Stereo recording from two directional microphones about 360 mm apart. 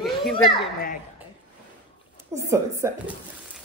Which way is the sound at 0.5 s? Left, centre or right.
Left.